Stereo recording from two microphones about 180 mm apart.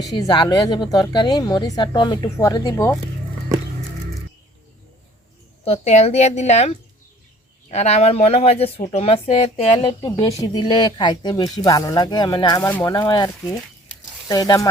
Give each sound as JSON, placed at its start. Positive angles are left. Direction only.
{"t": 0.1, "sound": "speech", "side_deg": 25}
{"t": 5.6, "sound": "speech", "side_deg": 35}
{"t": 9.8, "sound": "speech", "side_deg": 25}